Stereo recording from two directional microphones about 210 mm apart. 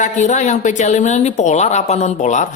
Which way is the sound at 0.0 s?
35° left (ahead or behind).